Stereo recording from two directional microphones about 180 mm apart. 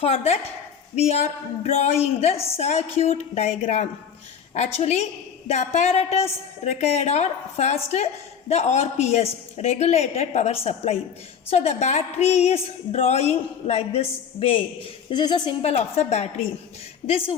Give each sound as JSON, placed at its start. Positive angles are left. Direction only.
{"t": 0.0, "sound": "a woman's voice", "side_deg": 35}
{"t": 1.6, "sound": "a woman's voice", "side_deg": 35}